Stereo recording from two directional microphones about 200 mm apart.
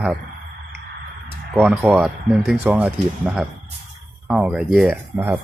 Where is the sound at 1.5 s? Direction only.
10° right (ahead or behind).